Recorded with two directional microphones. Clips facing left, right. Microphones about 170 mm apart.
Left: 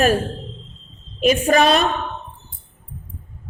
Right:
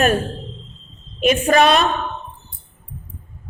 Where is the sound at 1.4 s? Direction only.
35° left (ahead or behind).